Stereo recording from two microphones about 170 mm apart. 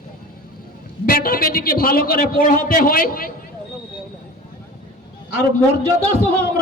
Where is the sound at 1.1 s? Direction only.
60° left (ahead or behind).